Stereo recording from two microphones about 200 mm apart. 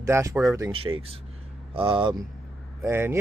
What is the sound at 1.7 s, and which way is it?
Speech, 25° right (ahead or behind).